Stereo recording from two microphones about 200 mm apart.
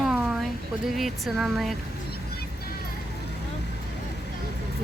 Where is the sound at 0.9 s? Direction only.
Centre (ahead or behind).